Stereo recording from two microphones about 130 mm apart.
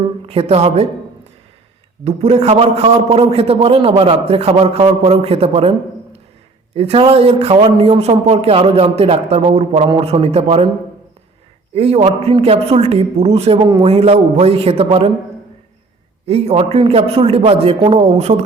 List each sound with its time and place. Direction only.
0.3 s a man's voice: 50° right (ahead or behind)
2.0 s a man's voice: 50° right (ahead or behind)
6.7 s a man's voice: 50° right (ahead or behind)
11.7 s a man's voice: 50° right (ahead or behind)
16.2 s a man's voice: 50° right (ahead or behind)